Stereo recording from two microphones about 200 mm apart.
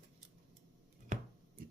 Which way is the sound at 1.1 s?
40° right (ahead or behind).